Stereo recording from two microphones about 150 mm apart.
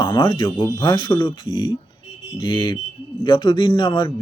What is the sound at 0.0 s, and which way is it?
Speech, 30° left (ahead or behind).